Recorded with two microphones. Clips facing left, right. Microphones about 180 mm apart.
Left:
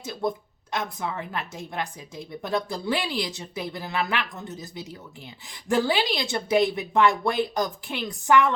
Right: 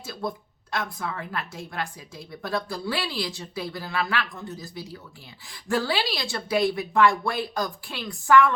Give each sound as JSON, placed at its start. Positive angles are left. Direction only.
{"t": 0.0, "sound": "a woman's voice", "side_deg": 20}